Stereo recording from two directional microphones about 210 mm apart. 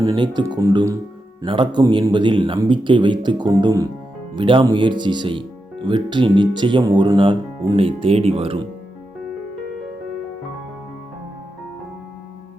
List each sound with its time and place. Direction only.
0.0 s speech: 20° right (ahead or behind)